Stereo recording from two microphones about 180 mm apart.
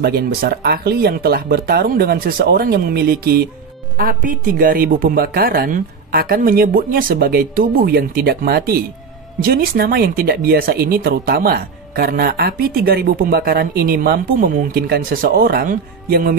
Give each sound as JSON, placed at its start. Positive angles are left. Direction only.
{"t": 0.0, "sound": "speech", "side_deg": -60}